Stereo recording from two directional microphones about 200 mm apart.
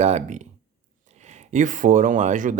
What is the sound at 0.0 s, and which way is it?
Speech, 35° right (ahead or behind).